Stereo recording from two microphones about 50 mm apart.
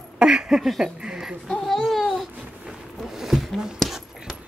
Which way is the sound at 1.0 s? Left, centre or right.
Centre.